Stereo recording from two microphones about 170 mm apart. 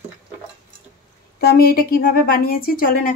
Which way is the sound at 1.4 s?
65° left (ahead or behind).